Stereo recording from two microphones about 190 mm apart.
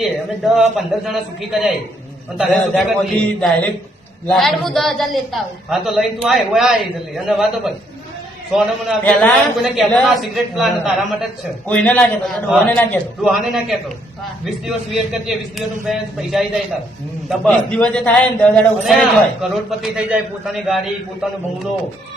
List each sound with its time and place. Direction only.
0.0 s a man's voice: centre (ahead or behind)
14.9 s a man's voice: centre (ahead or behind)